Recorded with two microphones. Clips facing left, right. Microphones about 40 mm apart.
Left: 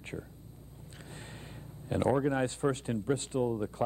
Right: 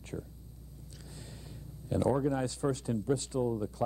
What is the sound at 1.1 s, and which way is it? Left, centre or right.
Speech, left.